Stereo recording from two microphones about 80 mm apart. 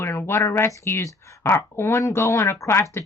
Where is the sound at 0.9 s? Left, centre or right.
Left.